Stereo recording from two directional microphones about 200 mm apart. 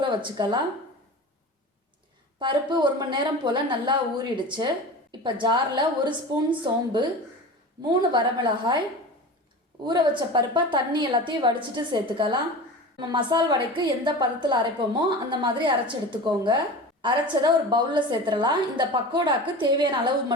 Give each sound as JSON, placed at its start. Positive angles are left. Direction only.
{"t": 0.0, "sound": "a woman's voice", "side_deg": -25}
{"t": 2.4, "sound": "a woman's voice", "side_deg": -25}
{"t": 9.8, "sound": "a woman's voice", "side_deg": -20}